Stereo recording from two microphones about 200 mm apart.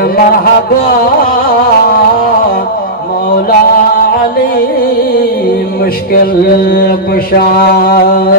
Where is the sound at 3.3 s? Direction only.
45° left (ahead or behind).